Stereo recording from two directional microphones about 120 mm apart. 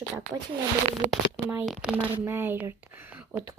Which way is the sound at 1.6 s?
5° right (ahead or behind).